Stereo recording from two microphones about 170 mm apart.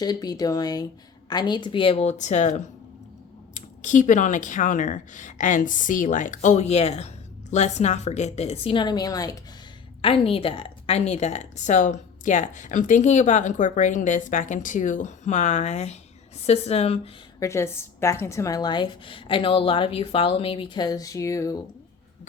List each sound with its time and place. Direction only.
0.0 s a woman's voice: 25° left (ahead or behind)
10.0 s a woman's voice: 35° left (ahead or behind)
17.4 s a woman's voice: 15° left (ahead or behind)